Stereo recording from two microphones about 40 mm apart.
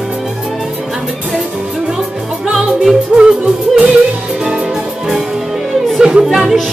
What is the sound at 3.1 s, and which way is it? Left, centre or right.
Yodeling, right.